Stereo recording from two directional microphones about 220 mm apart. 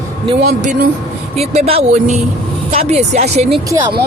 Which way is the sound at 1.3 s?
30° right (ahead or behind).